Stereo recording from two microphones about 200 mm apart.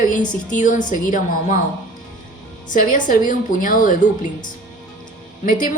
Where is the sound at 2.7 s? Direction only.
45° left (ahead or behind).